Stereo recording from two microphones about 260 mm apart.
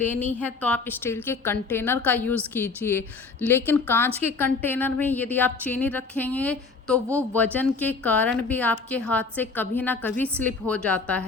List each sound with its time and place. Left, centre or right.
0.0 s a woman's voice: centre